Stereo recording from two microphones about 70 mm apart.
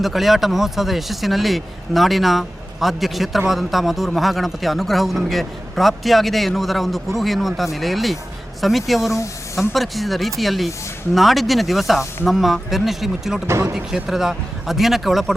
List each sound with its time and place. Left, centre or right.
0.0 s a man's voice: centre
13.5 s speech: right
13.7 s a man's voice: centre